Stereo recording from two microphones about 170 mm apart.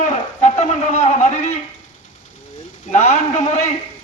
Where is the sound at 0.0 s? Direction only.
45° left (ahead or behind).